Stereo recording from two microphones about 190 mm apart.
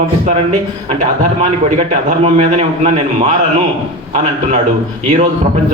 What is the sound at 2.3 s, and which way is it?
A man's voice, 35° right (ahead or behind).